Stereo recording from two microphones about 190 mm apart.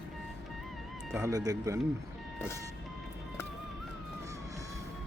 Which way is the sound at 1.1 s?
15° right (ahead or behind).